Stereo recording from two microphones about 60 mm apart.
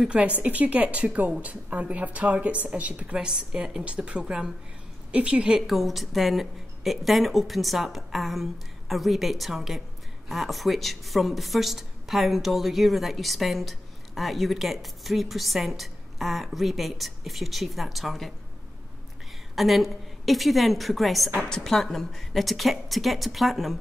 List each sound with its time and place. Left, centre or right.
0.0 s a woman's voice: centre
5.7 s a woman's voice: centre
19.5 s a woman's voice: centre
21.4 s a woman's voice: centre